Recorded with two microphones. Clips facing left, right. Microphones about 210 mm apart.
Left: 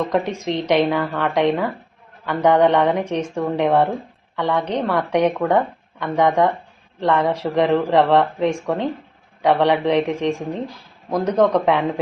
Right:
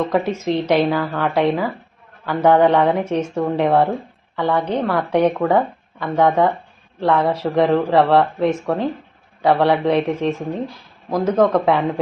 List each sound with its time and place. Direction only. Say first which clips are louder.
0.0 s speech: right 2 dB; 5° right (ahead or behind)